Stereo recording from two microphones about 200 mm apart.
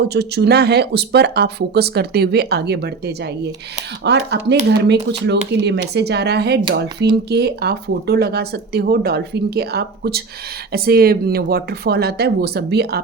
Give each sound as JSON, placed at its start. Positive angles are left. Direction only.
{"t": 0.0, "sound": "speech", "side_deg": -55}